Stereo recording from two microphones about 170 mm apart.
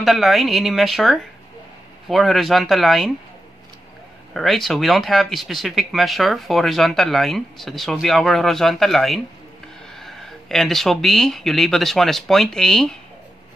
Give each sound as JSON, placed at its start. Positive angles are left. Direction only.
{"t": 0.0, "sound": "speech", "side_deg": 0}
{"t": 4.3, "sound": "speech", "side_deg": 0}